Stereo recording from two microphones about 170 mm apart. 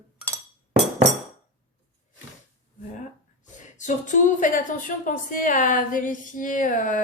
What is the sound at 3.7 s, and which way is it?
A woman's voice, 45° left (ahead or behind).